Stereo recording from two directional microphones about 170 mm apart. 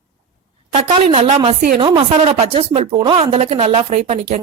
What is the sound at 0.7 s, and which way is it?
A woman's voice, 35° right (ahead or behind).